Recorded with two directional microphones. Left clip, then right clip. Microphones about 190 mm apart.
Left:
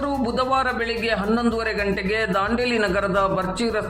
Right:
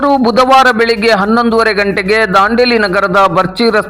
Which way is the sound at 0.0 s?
35° right (ahead or behind).